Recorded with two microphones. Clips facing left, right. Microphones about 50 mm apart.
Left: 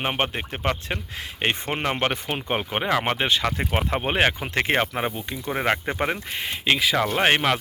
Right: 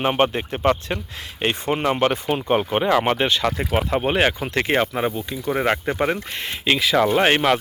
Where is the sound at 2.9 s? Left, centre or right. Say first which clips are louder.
Right 2 dB; centre.